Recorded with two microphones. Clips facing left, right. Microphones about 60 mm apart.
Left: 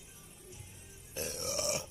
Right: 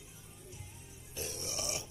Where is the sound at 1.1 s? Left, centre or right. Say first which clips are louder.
Left 4 dB; left.